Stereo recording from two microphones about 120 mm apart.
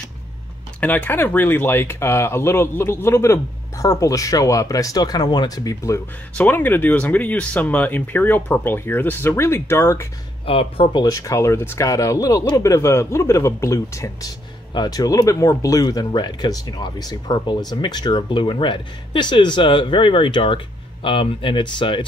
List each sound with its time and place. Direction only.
0.7 s speech: 15° left (ahead or behind); by 5.9 s 30° left (ahead or behind)
6.3 s speech: 15° left (ahead or behind)
10.4 s speech: 50° left (ahead or behind)
11.0 s speech: 30° left (ahead or behind)